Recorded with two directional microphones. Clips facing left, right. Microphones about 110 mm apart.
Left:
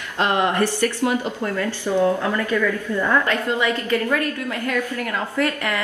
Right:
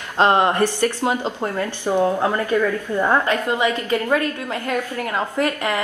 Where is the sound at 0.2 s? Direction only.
25° right (ahead or behind).